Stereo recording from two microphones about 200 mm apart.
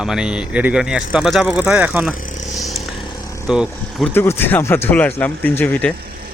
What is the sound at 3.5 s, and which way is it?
Speech, 5° right (ahead or behind).